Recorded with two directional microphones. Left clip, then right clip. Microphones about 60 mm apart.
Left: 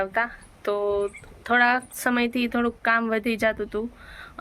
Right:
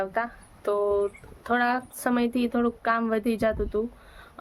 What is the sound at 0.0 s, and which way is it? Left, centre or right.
Speech, right.